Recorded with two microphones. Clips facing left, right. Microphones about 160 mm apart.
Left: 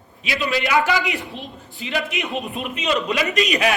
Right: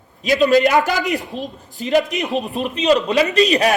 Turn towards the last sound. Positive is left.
turn(degrees=-35)  # may be behind; listen again after turning